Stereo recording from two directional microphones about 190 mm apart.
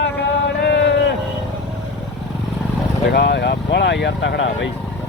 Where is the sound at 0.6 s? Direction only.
60° left (ahead or behind).